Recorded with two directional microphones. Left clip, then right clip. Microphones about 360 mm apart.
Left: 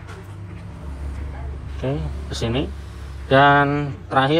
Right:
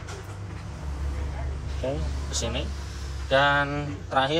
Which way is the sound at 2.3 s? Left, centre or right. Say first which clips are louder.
Left 4 dB; left.